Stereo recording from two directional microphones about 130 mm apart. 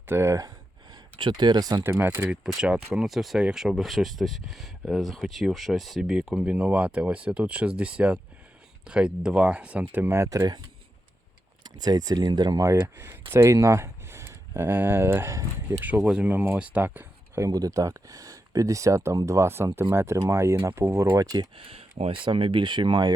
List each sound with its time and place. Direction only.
0.1 s speech: 20° right (ahead or behind)
1.1 s speech: 35° right (ahead or behind)
1.8 s speech: 20° right (ahead or behind)
11.6 s speech: 30° right (ahead or behind)
16.0 s speech: 10° right (ahead or behind)
21.1 s speech: 30° right (ahead or behind)
21.5 s speech: 45° right (ahead or behind)